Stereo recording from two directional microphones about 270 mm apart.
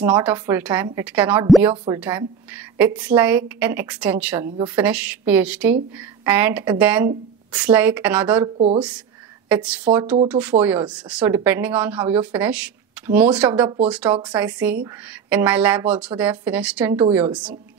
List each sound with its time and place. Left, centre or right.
0.0 s a woman's voice: centre
9.9 s speech: right
10.2 s a woman's voice: centre